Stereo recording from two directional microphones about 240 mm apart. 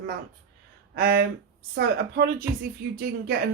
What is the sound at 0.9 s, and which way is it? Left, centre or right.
A woman's voice, right.